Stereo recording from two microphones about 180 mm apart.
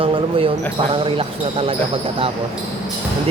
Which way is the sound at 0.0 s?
30° right (ahead or behind).